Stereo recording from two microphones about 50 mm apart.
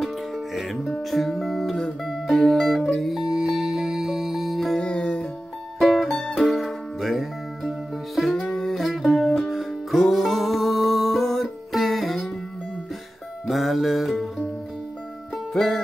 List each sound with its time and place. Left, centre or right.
1.1 s music: centre
3.3 s music: centre
4.7 s music: left
5.8 s music: centre
8.3 s music: centre
13.5 s music: centre
15.5 s music: centre